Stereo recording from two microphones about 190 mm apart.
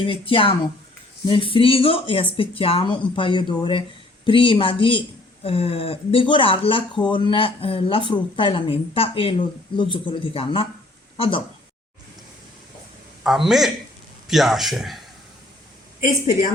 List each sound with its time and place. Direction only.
0.0 s a woman's voice: 30° left (ahead or behind)
13.2 s a man's voice: centre (ahead or behind)
16.0 s a woman's voice: 45° left (ahead or behind)